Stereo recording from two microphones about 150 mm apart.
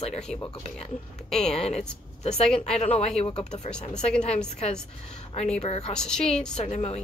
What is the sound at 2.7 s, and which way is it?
Speech, 45° left (ahead or behind).